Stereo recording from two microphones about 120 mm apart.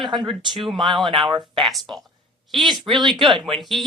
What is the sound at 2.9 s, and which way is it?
Speech, 35° right (ahead or behind).